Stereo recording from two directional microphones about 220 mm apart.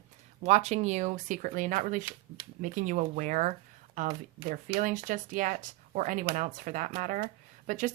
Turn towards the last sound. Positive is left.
turn(degrees=-35)  # may be behind; listen again after turning